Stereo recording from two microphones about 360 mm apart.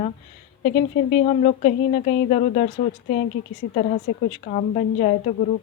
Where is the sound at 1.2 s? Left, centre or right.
Centre.